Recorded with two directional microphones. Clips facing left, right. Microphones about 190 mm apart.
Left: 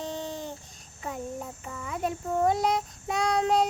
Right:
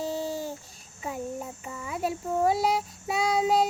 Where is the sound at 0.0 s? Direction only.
5° right (ahead or behind).